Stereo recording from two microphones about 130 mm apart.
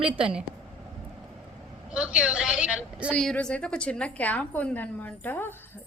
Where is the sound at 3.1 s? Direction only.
10° left (ahead or behind).